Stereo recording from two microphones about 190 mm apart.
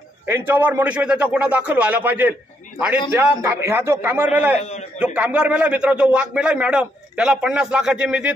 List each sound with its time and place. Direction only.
0.3 s a man's voice: 10° right (ahead or behind)
4.6 s a man's voice: 35° left (ahead or behind)
4.9 s a man's voice: 5° right (ahead or behind)